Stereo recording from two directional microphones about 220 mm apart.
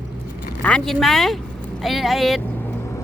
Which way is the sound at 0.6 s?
5° left (ahead or behind).